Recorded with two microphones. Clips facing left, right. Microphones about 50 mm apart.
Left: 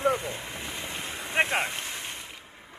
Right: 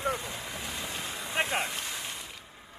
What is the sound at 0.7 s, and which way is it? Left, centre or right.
Boat, left.